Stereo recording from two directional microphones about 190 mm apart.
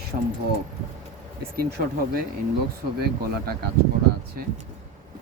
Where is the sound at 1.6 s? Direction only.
55° right (ahead or behind).